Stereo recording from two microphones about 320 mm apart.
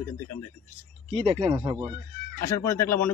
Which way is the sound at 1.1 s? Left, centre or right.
Centre.